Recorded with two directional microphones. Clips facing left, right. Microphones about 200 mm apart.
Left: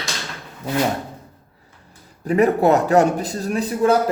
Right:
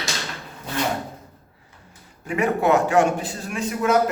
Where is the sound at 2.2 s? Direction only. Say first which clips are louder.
Left 5 dB; 35° left (ahead or behind).